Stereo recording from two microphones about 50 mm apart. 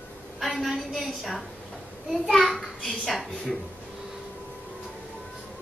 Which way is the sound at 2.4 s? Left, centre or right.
Centre.